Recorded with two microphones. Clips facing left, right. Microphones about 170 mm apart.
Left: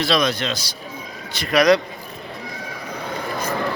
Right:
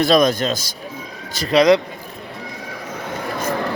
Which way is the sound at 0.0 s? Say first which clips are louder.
Right 5 dB; 45° right (ahead or behind).